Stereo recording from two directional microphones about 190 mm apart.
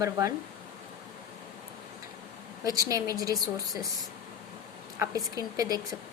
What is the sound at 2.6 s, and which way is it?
A woman's voice, 20° right (ahead or behind).